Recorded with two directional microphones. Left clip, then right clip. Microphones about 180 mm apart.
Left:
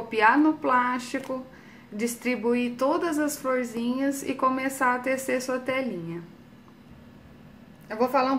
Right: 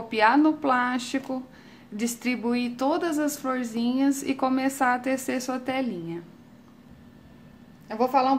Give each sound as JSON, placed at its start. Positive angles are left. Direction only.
{"t": 0.1, "sound": "a woman's voice", "side_deg": -40}
{"t": 7.9, "sound": "a woman's voice", "side_deg": -30}